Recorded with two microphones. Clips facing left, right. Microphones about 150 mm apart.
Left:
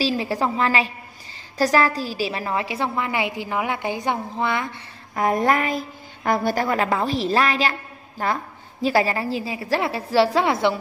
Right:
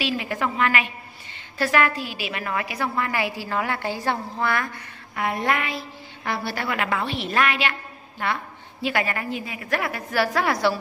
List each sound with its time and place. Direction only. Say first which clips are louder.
0.0 s a woman's voice: left 4 dB; 35° left (ahead or behind)
5.1 s a woman's voice: left 5 dB; 40° left (ahead or behind); by 10.8 s 20° left (ahead or behind)